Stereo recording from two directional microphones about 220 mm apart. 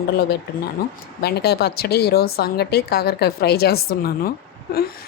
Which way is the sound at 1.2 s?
45° left (ahead or behind).